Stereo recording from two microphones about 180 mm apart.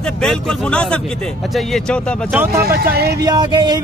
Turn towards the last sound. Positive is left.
turn(degrees=-25)  # may be behind; listen again after turning